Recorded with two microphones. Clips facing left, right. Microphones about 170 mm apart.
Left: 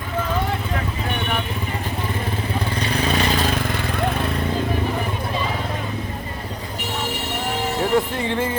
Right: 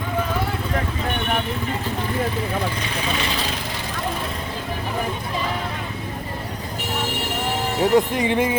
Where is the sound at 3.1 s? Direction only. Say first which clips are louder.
Left 5 dB; 45° left (ahead or behind).